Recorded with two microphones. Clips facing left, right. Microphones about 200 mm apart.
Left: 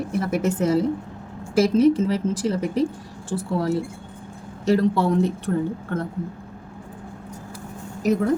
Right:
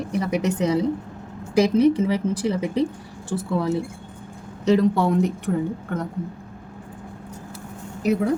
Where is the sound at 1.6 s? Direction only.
15° right (ahead or behind).